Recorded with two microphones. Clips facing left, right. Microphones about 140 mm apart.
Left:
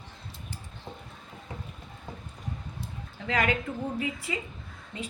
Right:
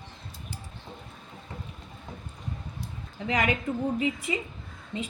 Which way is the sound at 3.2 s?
20° right (ahead or behind).